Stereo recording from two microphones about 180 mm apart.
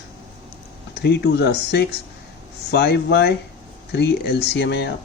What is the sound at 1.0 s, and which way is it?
A man's voice, 65° left (ahead or behind).